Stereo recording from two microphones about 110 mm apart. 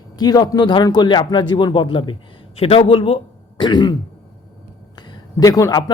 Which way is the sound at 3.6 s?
40° left (ahead or behind).